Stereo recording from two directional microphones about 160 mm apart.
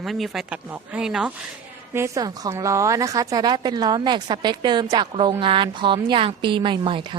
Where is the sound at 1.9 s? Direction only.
20° right (ahead or behind).